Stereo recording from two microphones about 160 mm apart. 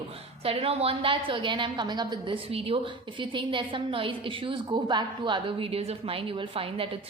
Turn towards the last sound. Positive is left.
turn(degrees=-35)  # may be behind; listen again after turning